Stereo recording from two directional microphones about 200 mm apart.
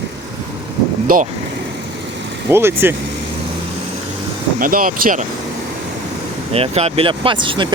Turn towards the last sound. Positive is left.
turn(degrees=-25)  # may be behind; listen again after turning